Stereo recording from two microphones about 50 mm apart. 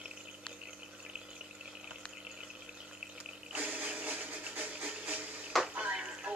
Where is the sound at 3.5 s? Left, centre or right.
Right.